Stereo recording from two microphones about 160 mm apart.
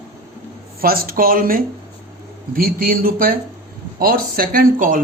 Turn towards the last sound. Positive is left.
turn(degrees=-55)  # may be behind; listen again after turning